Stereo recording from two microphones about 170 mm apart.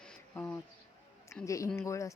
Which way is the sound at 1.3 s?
20° left (ahead or behind).